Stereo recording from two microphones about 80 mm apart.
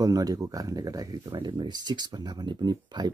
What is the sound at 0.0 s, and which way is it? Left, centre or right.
Speech, right.